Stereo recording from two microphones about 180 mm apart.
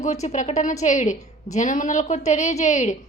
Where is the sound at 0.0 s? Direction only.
40° left (ahead or behind).